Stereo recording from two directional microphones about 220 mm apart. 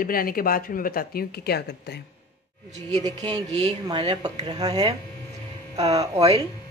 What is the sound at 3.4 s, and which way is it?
Speech, 30° right (ahead or behind).